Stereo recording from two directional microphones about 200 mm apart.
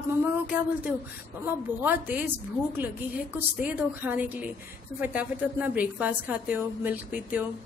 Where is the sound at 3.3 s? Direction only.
10° right (ahead or behind).